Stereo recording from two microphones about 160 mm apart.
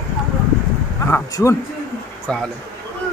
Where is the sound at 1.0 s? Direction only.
15° left (ahead or behind).